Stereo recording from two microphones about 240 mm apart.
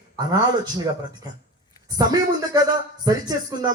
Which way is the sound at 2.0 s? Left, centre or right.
Centre.